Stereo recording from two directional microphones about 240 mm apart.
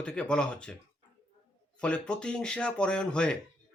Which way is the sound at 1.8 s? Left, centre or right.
Centre.